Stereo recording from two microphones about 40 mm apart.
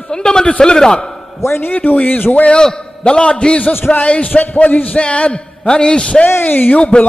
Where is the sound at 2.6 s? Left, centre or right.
Left.